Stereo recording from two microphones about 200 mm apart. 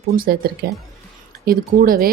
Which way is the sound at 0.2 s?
50° right (ahead or behind).